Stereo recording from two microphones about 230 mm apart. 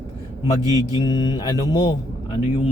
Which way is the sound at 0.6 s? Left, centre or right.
Centre.